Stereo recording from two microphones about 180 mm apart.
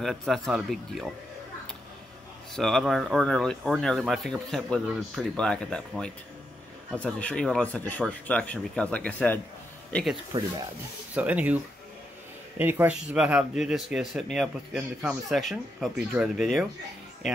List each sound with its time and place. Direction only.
0.0 s speech: centre (ahead or behind)
2.5 s speech: centre (ahead or behind)
10.3 s speech: 25° right (ahead or behind)
11.1 s speech: 10° right (ahead or behind)